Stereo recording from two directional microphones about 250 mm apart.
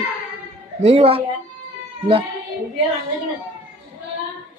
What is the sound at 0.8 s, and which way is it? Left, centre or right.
Speech, right.